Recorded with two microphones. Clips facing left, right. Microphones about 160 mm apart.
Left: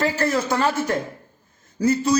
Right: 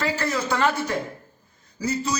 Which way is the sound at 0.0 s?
50° left (ahead or behind).